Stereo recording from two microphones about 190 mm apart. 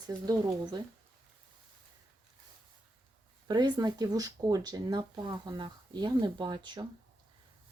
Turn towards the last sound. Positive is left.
turn(degrees=-25)  # may be behind; listen again after turning